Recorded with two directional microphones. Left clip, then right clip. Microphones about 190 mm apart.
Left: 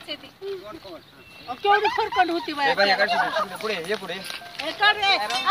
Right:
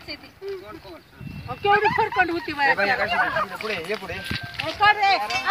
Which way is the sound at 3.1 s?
65° left (ahead or behind).